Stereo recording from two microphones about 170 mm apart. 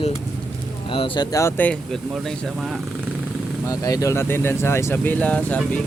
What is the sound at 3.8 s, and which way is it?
Speech, 20° left (ahead or behind).